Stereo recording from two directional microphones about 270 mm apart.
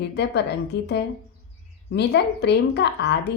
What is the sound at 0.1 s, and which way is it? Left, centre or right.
A woman's voice, left.